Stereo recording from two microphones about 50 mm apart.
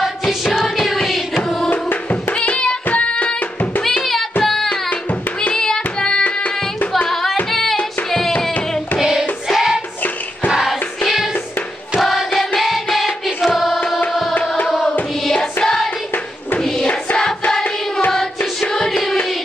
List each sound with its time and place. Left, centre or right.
0.0 s music: centre
1.7 s tabla: left
2.3 s music: left
3.8 s music: centre
7.5 s singing: centre
9.5 s hands: centre
12.0 s music: centre
17.2 s hands: centre
18.1 s music: centre